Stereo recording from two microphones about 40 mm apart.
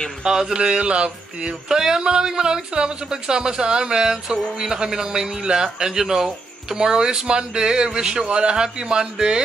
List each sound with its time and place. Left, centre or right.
0.2 s speech: centre
1.7 s speech: centre